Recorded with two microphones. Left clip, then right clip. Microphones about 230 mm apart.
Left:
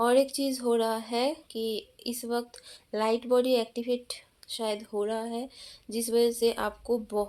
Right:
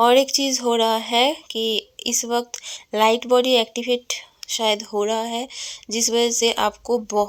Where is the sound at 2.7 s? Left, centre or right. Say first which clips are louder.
Right 10 dB; right.